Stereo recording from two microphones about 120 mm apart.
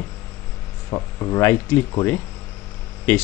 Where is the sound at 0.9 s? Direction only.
30° left (ahead or behind).